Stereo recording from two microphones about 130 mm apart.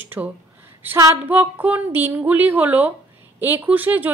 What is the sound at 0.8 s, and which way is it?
Child singing, 20° right (ahead or behind).